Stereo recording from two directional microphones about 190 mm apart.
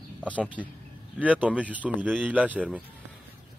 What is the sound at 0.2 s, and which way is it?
Speech, 5° left (ahead or behind).